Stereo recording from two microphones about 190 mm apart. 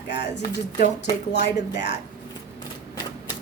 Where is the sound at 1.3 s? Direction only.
65° left (ahead or behind).